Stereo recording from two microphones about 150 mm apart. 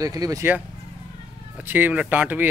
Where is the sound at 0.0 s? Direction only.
25° right (ahead or behind).